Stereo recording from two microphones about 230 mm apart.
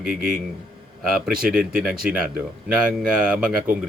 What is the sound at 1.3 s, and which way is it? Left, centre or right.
Speech, right.